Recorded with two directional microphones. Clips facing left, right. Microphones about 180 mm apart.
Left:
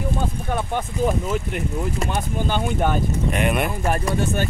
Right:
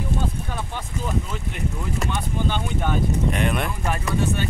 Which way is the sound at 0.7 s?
50° left (ahead or behind).